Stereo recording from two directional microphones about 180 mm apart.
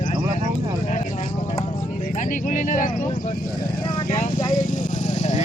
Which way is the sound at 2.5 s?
45° left (ahead or behind).